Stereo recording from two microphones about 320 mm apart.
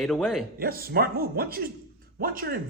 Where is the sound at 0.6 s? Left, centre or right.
Right.